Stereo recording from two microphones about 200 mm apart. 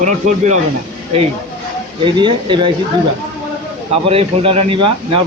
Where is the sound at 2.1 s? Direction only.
25° right (ahead or behind).